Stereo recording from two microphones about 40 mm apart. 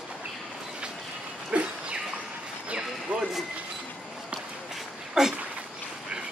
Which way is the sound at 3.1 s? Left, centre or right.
Right.